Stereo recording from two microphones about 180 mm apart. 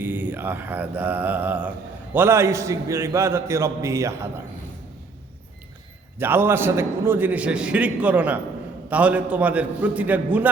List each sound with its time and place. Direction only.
0.0 s a man's voice: 10° right (ahead or behind)
6.1 s a man's voice: 10° right (ahead or behind)